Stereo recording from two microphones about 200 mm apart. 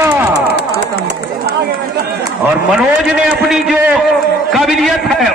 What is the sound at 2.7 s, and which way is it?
A man's voice, 5° right (ahead or behind).